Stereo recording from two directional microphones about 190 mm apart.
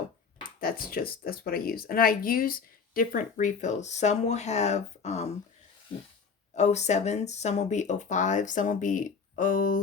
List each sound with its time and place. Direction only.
0.6 s speech: 50° left (ahead or behind)
6.5 s speech: 35° left (ahead or behind)